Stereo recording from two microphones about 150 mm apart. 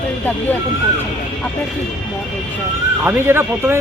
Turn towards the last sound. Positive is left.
turn(degrees=-15)  # may be behind; listen again after turning